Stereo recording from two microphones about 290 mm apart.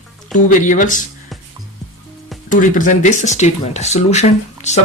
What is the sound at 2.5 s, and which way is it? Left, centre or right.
Speech, left.